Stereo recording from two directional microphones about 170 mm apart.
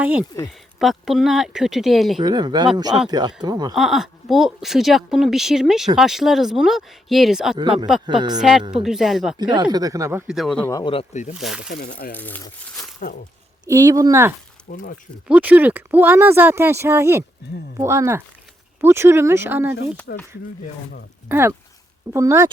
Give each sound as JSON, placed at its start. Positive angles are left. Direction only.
{"t": 0.0, "sound": "speech", "side_deg": -10}
{"t": 2.2, "sound": "speech", "side_deg": -25}
{"t": 3.8, "sound": "speech", "side_deg": 0}
{"t": 9.4, "sound": "speech", "side_deg": -25}
{"t": 10.2, "sound": "speech", "side_deg": 0}
{"t": 10.7, "sound": "speech", "side_deg": 20}
{"t": 10.9, "sound": "speech", "side_deg": 40}
{"t": 11.3, "sound": "speech", "side_deg": -5}
{"t": 11.7, "sound": "speech", "side_deg": 65}
{"t": 12.1, "sound": "speech", "side_deg": 10}
{"t": 13.7, "sound": "speech", "side_deg": -20}
{"t": 14.7, "sound": "speech", "side_deg": 60}
{"t": 15.3, "sound": "speech", "side_deg": -10}
{"t": 21.2, "sound": "speech", "side_deg": -15}